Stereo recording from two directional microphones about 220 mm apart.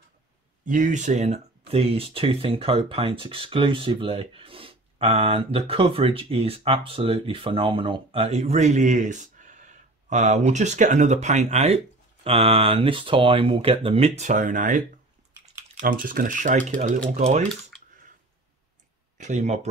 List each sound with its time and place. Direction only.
0.7 s speech: 35° right (ahead or behind)
15.8 s speech: 40° right (ahead or behind)
19.1 s speech: 30° right (ahead or behind)